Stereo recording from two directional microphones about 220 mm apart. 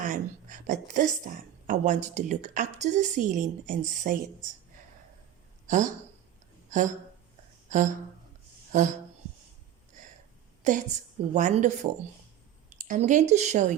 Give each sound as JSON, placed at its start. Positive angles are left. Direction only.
{"t": 0.0, "sound": "a woman's voice", "side_deg": -35}
{"t": 5.6, "sound": "speech", "side_deg": -35}
{"t": 8.7, "sound": "a woman's voice", "side_deg": -35}
{"t": 10.6, "sound": "a woman's voice", "side_deg": -35}